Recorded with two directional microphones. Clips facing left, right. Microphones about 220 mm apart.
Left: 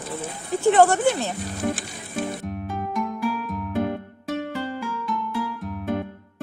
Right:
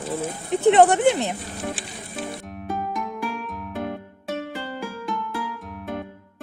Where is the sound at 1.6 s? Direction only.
Centre (ahead or behind).